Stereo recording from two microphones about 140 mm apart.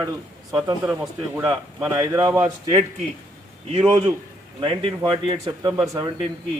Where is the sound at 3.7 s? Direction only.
35° right (ahead or behind).